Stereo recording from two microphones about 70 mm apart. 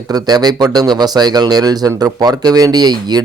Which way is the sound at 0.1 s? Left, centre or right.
Right.